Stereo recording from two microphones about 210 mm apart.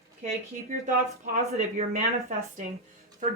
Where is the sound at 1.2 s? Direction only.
35° right (ahead or behind).